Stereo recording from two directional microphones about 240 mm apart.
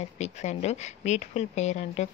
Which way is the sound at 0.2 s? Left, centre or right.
Left.